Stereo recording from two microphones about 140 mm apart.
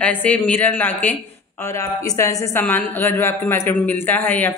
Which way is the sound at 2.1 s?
15° left (ahead or behind).